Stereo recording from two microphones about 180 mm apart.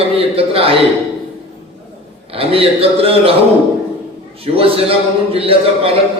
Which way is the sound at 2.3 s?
30° right (ahead or behind).